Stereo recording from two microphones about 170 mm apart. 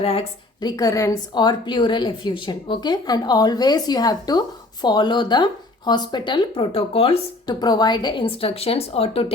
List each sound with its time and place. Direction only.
0.0 s a woman's voice: 35° left (ahead or behind)
0.6 s a woman's voice: 20° left (ahead or behind); by 9.2 s 35° left (ahead or behind)